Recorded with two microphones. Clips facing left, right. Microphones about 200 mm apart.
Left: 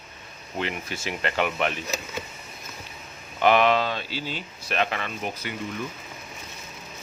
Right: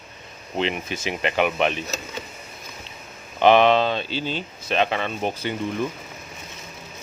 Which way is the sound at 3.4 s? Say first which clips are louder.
Right 4 dB; 25° right (ahead or behind).